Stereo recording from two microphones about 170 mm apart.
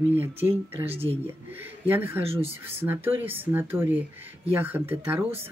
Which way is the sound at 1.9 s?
15° right (ahead or behind).